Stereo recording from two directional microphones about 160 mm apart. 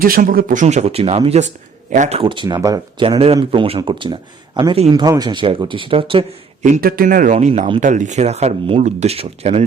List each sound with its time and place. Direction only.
0.0 s speech: 60° right (ahead or behind); by 6.2 s 35° right (ahead or behind)
6.6 s speech: 60° right (ahead or behind)
7.3 s speech: 45° right (ahead or behind)